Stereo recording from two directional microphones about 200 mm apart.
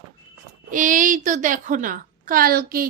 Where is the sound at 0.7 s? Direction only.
40° right (ahead or behind).